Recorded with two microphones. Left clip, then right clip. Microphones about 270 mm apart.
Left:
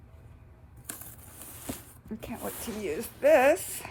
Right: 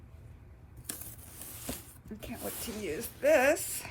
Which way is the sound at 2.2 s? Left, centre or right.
Left.